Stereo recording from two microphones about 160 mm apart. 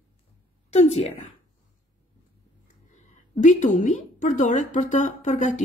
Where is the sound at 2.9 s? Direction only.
50° left (ahead or behind).